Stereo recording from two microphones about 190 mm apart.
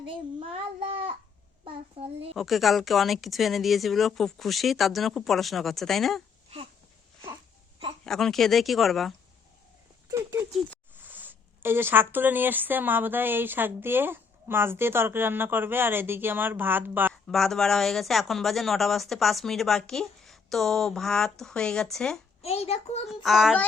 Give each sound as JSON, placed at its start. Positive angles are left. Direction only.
{"t": 0.3, "sound": "child singing", "side_deg": -30}
{"t": 1.6, "sound": "a child's voice", "side_deg": -30}
{"t": 2.3, "sound": "speech", "side_deg": 0}
{"t": 8.0, "sound": "speech", "side_deg": 0}
{"t": 10.1, "sound": "speech", "side_deg": -15}
{"t": 17.2, "sound": "speech", "side_deg": 0}
{"t": 22.4, "sound": "a child's voice", "side_deg": 35}
{"t": 23.0, "sound": "speech", "side_deg": 0}